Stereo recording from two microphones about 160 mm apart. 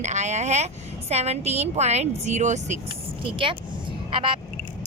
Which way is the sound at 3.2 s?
35° right (ahead or behind).